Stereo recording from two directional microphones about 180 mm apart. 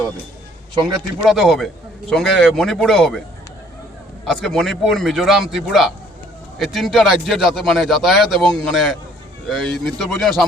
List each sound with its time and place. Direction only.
1.2 s a man's voice: centre (ahead or behind)
4.3 s a man's voice: centre (ahead or behind)